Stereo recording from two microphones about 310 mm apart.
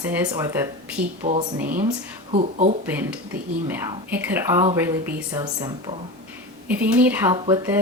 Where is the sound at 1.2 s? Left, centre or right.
Right.